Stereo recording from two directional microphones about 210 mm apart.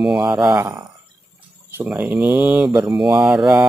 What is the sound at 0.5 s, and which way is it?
Speech, 15° right (ahead or behind).